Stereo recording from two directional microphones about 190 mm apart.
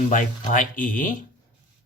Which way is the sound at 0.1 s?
40° left (ahead or behind).